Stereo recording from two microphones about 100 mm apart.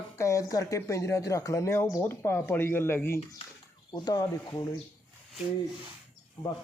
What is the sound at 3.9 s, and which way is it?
Speech, 45° left (ahead or behind).